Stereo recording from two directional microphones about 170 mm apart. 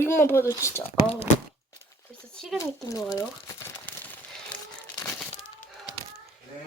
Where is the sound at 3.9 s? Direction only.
10° left (ahead or behind).